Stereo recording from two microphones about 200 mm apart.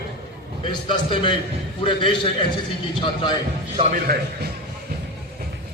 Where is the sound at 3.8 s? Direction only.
40° right (ahead or behind).